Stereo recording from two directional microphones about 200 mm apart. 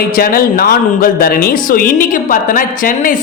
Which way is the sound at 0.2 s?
45° left (ahead or behind).